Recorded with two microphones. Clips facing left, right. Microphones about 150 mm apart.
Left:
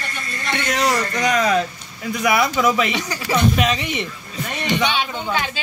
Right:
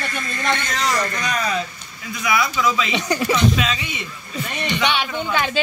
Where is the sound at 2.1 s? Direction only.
55° left (ahead or behind).